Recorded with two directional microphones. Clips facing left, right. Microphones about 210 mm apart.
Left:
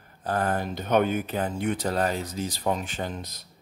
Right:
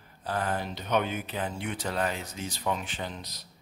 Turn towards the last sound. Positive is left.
turn(degrees=50)  # may be behind; listen again after turning